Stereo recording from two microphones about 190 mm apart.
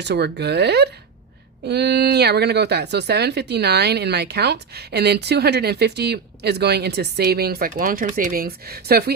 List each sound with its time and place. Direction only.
0.0 s speech: 60° right (ahead or behind)